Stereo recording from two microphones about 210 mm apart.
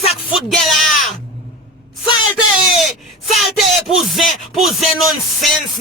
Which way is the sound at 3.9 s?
Centre (ahead or behind).